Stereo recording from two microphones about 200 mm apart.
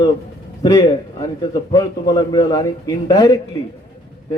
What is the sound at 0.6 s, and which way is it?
A man's voice, 20° left (ahead or behind).